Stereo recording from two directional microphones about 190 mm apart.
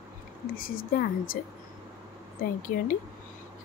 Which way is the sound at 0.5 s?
50° left (ahead or behind).